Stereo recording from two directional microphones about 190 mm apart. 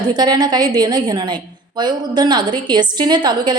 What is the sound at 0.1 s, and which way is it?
A woman's voice, 20° right (ahead or behind).